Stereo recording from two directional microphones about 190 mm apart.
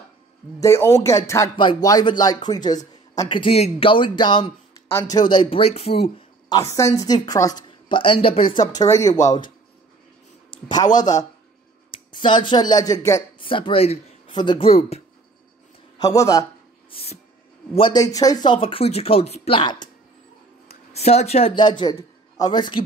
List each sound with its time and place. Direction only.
0.6 s speech: 15° left (ahead or behind); by 6.2 s 30° left (ahead or behind)
6.5 s a woman's voice: 15° left (ahead or behind)
10.5 s speech: 20° left (ahead or behind)
16.0 s a woman's voice: 20° left (ahead or behind)
16.9 s music: 35° left (ahead or behind)
17.7 s speech: 25° left (ahead or behind)
20.9 s speech: 35° left (ahead or behind)